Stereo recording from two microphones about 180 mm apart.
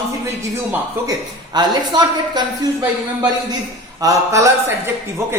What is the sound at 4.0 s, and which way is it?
Speech, 20° right (ahead or behind).